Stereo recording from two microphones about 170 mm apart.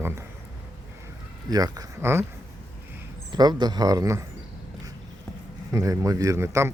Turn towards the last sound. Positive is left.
turn(degrees=-15)  # may be behind; listen again after turning